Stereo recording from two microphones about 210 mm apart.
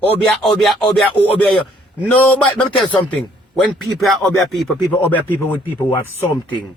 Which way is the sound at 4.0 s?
Centre (ahead or behind).